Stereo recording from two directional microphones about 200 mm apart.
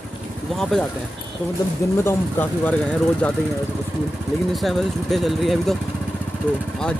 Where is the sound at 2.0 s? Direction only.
10° left (ahead or behind).